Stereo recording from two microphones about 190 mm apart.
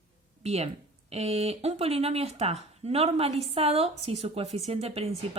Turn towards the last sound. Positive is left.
turn(degrees=-30)  # may be behind; listen again after turning